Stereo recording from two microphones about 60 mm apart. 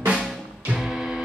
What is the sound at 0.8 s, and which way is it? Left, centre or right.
Music, centre.